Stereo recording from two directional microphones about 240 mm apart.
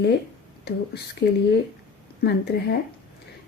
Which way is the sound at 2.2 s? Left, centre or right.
Left.